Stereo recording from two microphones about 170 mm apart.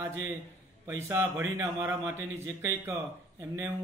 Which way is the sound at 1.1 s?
15° right (ahead or behind).